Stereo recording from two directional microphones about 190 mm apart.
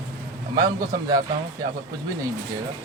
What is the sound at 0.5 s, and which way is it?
Speech, 20° right (ahead or behind).